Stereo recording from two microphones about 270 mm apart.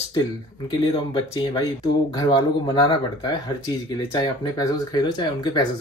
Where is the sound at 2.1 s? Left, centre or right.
Centre.